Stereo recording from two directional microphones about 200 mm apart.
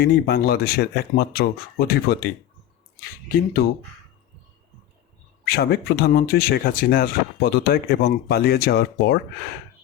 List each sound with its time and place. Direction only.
0.0 s speech: 55° left (ahead or behind)
5.5 s speech: 55° left (ahead or behind)